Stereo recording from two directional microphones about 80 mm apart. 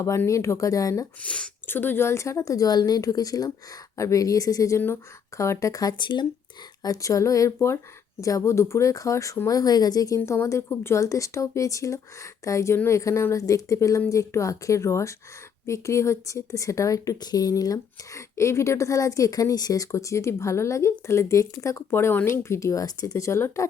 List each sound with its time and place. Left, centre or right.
0.3 s speech: left
1.2 s speech: centre
1.6 s speech: left
6.0 s speech: left
6.8 s speech: left
10.2 s speech: left
21.8 s speech: left